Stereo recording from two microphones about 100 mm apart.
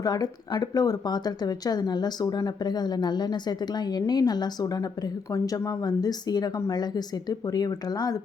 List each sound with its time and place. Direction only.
0.0 s speech: 40° left (ahead or behind)